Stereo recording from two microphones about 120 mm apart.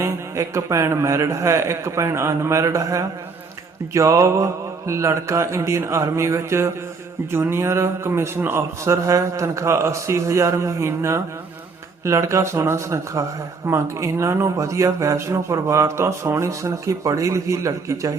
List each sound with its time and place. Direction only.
0.0 s speech: 25° right (ahead or behind)